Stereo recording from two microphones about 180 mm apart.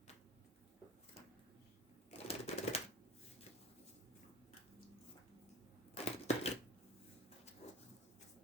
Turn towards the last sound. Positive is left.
turn(degrees=35)  # may be behind; listen again after turning